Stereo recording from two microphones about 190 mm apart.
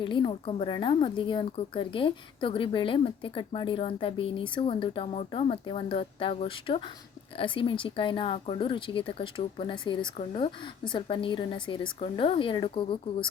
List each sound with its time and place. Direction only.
0.0 s a woman's voice: 25° left (ahead or behind)